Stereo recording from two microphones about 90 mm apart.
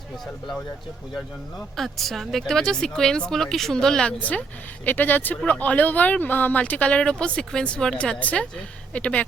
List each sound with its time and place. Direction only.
1.1 s speech: centre (ahead or behind)